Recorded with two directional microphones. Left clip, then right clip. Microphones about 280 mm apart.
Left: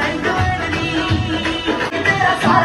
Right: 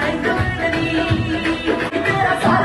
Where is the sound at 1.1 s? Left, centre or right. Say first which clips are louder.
Even; left.